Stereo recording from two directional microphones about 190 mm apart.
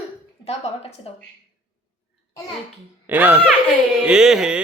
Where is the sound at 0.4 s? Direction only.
30° left (ahead or behind).